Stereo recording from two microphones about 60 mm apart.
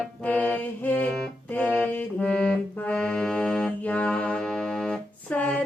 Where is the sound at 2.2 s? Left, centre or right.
Centre.